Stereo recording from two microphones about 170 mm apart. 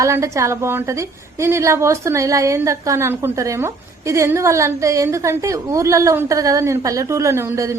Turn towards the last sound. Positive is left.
turn(degrees=-15)  # may be behind; listen again after turning